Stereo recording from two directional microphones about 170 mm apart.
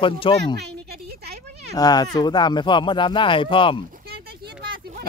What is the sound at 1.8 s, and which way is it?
Speech, 25° left (ahead or behind).